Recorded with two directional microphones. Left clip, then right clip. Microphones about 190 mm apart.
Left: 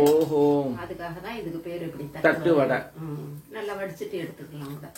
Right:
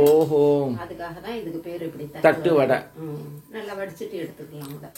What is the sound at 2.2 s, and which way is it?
Speech, 50° right (ahead or behind).